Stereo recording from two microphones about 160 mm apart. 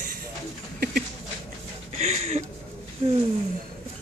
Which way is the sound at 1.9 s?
40° right (ahead or behind).